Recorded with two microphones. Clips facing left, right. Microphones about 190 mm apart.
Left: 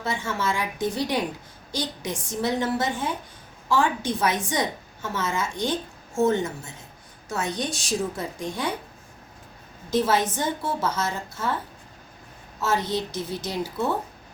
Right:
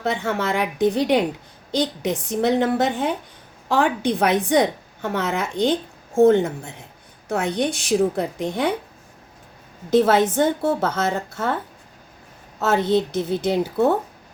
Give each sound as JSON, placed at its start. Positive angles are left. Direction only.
{"t": 0.0, "sound": "a woman's voice", "side_deg": -65}
{"t": 9.9, "sound": "a woman's voice", "side_deg": -60}
{"t": 12.5, "sound": "a woman's voice", "side_deg": -60}